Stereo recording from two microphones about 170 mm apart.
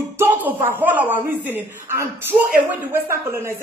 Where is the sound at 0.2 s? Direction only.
10° right (ahead or behind).